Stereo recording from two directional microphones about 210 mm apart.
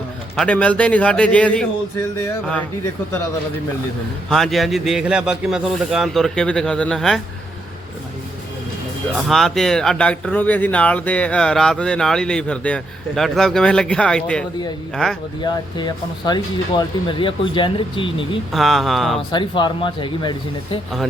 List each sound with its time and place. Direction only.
0.3 s speech: 5° left (ahead or behind)
4.3 s speech: centre (ahead or behind)
9.1 s speech: centre (ahead or behind)
15.4 s speech: 20° left (ahead or behind)
18.5 s speech: centre (ahead or behind)
19.3 s speech: 20° left (ahead or behind)